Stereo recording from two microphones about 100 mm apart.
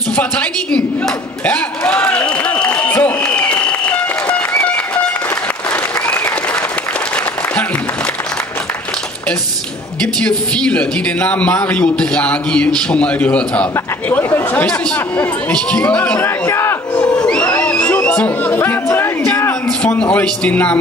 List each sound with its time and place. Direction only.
0.1 s a sound: 15° left (ahead or behind)
10.2 s a man's voice: 10° left (ahead or behind)
16.2 s crowd: 25° left (ahead or behind)
19.8 s a man's voice: 10° left (ahead or behind)